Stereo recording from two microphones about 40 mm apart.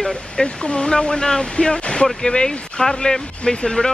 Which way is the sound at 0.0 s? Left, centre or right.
Left.